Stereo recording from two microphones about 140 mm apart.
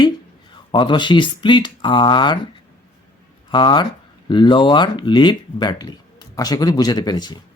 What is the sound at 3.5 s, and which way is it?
Speech, 35° left (ahead or behind).